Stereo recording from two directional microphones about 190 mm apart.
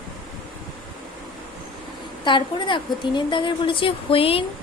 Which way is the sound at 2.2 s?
25° left (ahead or behind).